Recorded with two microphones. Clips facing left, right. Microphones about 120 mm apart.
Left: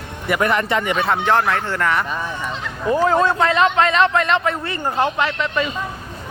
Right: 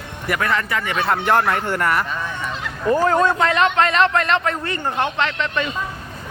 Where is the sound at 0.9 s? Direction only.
Centre (ahead or behind).